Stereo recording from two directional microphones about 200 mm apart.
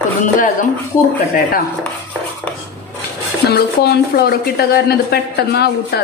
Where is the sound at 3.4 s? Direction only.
55° left (ahead or behind).